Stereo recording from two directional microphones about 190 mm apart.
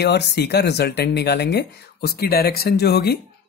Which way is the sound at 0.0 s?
65° left (ahead or behind).